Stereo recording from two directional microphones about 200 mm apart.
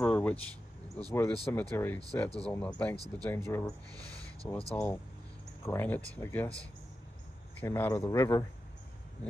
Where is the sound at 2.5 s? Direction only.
5° left (ahead or behind).